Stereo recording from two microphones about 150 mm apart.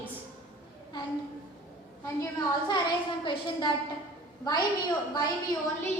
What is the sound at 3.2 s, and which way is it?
A woman's voice, 30° left (ahead or behind).